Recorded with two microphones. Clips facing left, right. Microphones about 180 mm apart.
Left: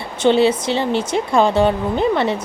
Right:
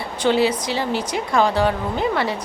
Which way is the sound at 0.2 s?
25° left (ahead or behind).